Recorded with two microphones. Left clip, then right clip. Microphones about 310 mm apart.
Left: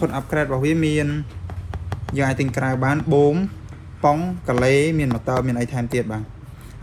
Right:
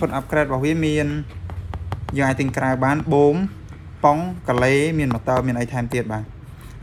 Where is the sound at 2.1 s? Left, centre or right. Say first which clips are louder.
Right 1 dB; right.